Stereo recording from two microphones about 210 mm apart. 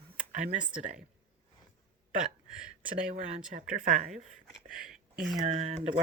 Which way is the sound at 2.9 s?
40° right (ahead or behind).